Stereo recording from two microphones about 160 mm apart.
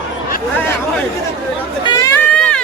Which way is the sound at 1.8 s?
25° left (ahead or behind).